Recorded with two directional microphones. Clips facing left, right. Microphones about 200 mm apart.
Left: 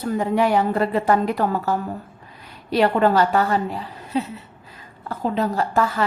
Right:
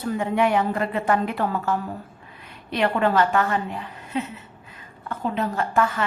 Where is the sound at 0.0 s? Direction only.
40° left (ahead or behind).